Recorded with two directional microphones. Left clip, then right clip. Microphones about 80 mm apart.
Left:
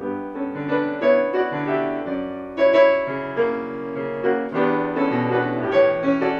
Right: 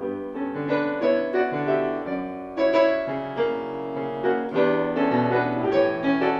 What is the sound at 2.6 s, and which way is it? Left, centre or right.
Music, right.